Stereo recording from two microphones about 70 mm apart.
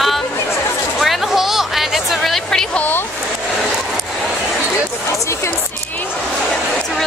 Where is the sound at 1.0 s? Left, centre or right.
Centre.